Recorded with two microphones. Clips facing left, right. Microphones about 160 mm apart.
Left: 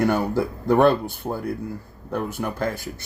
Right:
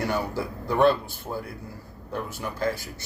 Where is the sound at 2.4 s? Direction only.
55° left (ahead or behind).